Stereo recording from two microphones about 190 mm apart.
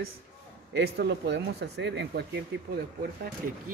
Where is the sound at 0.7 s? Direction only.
60° right (ahead or behind).